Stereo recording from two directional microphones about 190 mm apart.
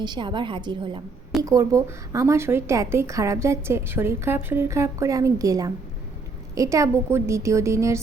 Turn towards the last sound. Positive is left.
turn(degrees=-15)  # may be behind; listen again after turning